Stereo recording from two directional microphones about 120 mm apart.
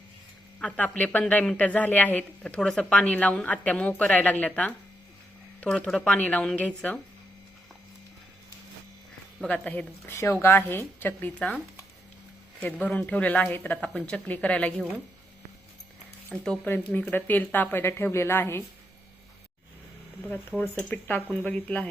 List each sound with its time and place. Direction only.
0.6 s speech: 10° left (ahead or behind)
9.4 s speech: 10° left (ahead or behind)
16.3 s speech: 5° left (ahead or behind)
16.6 s speech: 15° left (ahead or behind)
20.6 s speech: 15° left (ahead or behind)